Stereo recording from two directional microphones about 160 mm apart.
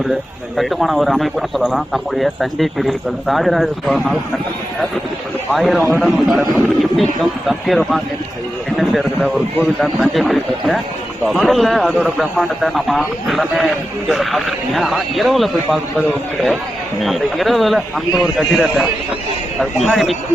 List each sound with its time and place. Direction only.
0.1 s speech: centre (ahead or behind)
5.5 s speech: centre (ahead or behind)
17.0 s speech: centre (ahead or behind)